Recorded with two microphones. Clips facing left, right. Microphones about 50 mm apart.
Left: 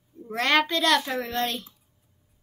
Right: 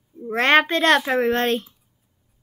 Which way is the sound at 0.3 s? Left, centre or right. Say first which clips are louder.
Right 6 dB; right.